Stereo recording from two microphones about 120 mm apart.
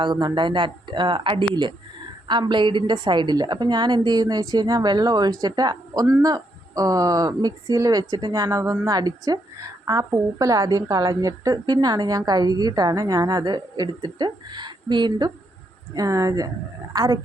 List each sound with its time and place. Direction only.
0.0 s speech: 40° right (ahead or behind)
16.0 s speech: 30° right (ahead or behind)